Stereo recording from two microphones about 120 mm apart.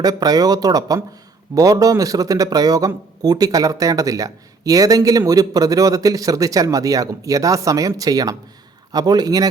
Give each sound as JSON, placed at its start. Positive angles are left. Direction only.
{"t": 0.0, "sound": "speech", "side_deg": -30}